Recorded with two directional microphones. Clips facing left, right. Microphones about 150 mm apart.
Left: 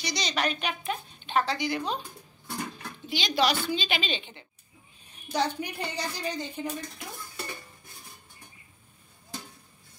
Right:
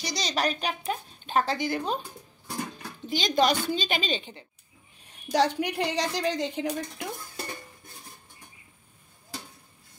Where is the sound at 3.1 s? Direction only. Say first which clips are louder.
Right 3 dB; 45° right (ahead or behind).